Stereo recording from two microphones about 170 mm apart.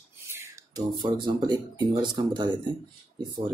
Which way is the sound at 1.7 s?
25° right (ahead or behind).